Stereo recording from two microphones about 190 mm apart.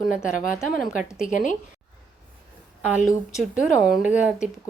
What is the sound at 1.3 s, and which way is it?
Speech, 40° left (ahead or behind).